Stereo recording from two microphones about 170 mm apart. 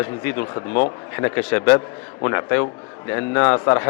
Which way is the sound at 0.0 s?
10° left (ahead or behind).